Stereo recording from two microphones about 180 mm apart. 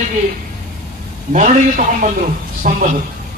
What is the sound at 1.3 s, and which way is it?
A man's voice, 45° right (ahead or behind).